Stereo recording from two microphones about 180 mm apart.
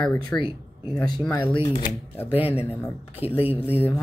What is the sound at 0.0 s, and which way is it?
Speech, 5° left (ahead or behind).